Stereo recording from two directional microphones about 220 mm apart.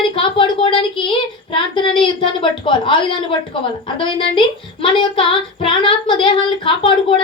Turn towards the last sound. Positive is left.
turn(degrees=25)  # may be behind; listen again after turning